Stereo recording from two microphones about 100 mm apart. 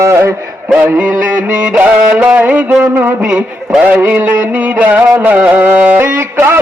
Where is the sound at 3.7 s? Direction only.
15° right (ahead or behind).